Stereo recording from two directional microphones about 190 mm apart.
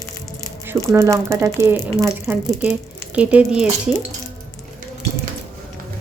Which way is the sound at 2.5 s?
5° right (ahead or behind).